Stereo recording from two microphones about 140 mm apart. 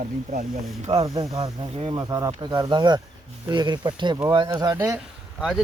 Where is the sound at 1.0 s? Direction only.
25° right (ahead or behind).